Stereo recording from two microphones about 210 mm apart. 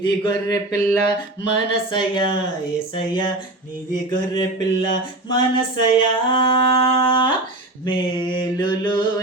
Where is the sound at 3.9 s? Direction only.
20° left (ahead or behind).